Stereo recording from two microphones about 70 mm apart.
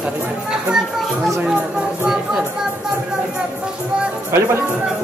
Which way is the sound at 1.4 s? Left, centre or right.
Centre.